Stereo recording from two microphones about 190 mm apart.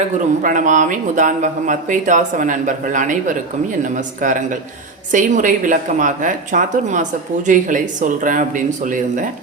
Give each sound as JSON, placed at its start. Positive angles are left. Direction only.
{"t": 0.4, "sound": "speech", "side_deg": -40}